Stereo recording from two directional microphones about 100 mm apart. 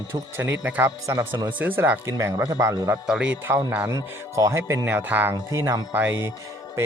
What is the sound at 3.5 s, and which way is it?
Speech, 20° right (ahead or behind).